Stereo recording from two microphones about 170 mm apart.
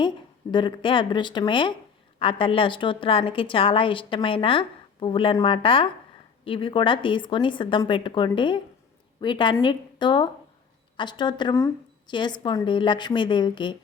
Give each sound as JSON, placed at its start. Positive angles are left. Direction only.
{"t": 0.5, "sound": "a woman's voice", "side_deg": 30}